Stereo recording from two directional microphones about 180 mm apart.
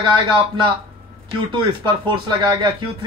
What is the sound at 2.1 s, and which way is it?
Speech, 25° right (ahead or behind).